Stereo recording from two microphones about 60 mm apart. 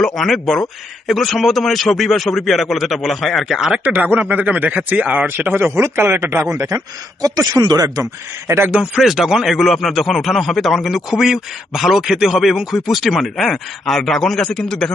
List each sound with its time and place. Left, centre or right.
0.2 s speech: centre
3.8 s speech: right
7.2 s speech: right
9.0 s speech: centre